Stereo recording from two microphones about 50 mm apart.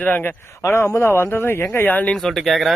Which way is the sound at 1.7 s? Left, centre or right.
Left.